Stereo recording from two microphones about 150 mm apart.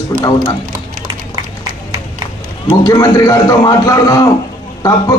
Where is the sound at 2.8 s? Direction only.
25° left (ahead or behind).